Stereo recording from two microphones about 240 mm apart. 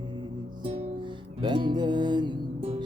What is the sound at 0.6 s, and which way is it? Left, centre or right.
Music, right.